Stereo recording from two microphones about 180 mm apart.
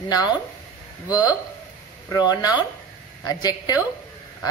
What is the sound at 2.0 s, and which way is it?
A woman's voice, 20° left (ahead or behind).